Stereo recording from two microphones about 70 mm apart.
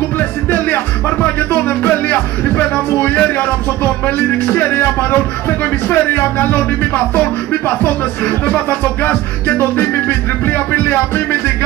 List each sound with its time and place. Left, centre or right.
1.2 s speech: left
3.8 s music: left